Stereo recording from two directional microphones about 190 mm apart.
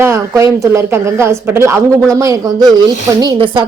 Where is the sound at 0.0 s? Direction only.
15° right (ahead or behind).